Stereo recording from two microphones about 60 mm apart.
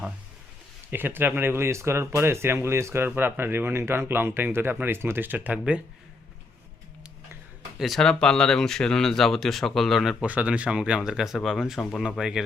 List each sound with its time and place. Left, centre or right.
0.9 s speech: right
7.8 s speech: centre
8.0 s speech: centre
10.2 s speech: right; by 11.9 s centre
12.2 s speech: centre